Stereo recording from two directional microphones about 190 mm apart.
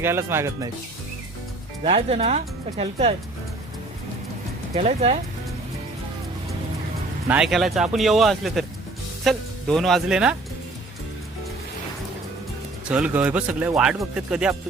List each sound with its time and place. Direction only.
0.0 s speech: 15° right (ahead or behind)
1.8 s speech: 30° right (ahead or behind)
4.7 s speech: 35° right (ahead or behind)
7.3 s speech: 5° right (ahead or behind)
12.9 s speech: 5° right (ahead or behind)